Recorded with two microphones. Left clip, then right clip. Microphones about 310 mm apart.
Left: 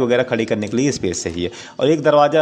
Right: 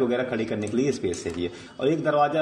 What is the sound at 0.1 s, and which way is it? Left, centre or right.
Speech, left.